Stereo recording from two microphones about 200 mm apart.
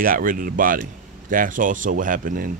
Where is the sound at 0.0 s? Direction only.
45° right (ahead or behind).